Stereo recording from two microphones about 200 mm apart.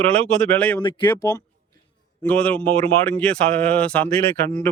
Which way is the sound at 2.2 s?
5° left (ahead or behind).